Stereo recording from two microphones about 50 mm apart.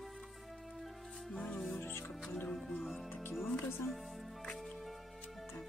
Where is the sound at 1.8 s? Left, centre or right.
Left.